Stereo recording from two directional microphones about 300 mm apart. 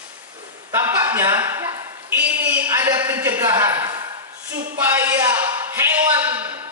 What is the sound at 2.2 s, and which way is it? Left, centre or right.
A man's voice, centre.